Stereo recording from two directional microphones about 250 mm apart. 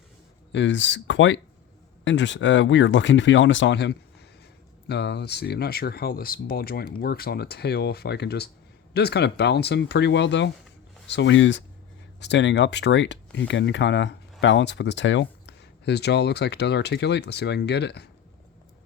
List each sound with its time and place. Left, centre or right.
0.5 s speech: left